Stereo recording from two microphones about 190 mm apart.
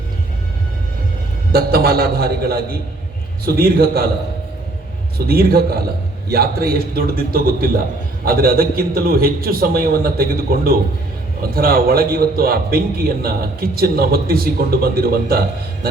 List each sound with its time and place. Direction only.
1.5 s a man's voice: 55° right (ahead or behind)
5.1 s a man's voice: 55° right (ahead or behind)